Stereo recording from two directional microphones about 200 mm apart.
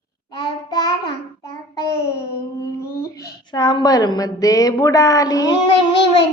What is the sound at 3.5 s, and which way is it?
A child's voice, 20° left (ahead or behind).